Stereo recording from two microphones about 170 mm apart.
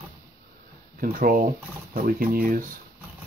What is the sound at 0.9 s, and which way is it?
Speech, 55° right (ahead or behind).